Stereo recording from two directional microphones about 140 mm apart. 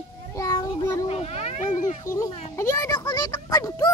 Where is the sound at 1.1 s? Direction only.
45° left (ahead or behind).